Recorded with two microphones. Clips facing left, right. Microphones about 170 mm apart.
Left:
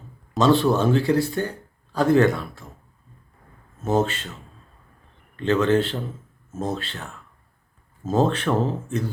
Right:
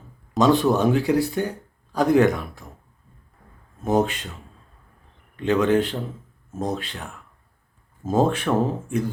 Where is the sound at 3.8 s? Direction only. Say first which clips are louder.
Right 1 dB; 15° right (ahead or behind).